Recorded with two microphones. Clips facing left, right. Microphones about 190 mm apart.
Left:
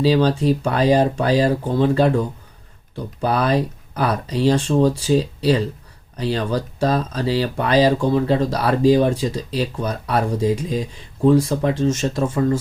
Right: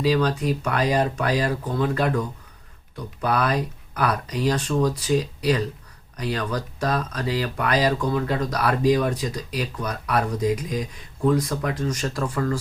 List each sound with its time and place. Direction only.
0.0 s speech: 30° left (ahead or behind)